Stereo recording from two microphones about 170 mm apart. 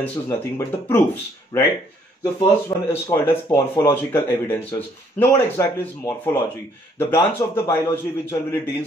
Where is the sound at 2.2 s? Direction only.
25° left (ahead or behind).